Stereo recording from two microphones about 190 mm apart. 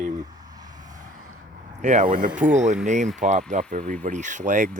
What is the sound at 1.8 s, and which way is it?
Speech, 40° right (ahead or behind).